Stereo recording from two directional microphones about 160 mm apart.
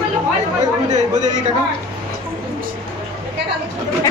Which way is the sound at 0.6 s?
45° right (ahead or behind).